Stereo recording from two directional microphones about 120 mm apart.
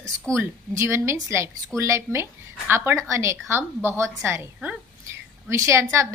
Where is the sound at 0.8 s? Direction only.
20° right (ahead or behind).